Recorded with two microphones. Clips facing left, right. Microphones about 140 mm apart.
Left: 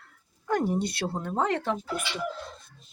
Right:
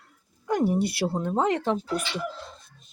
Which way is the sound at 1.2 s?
20° right (ahead or behind).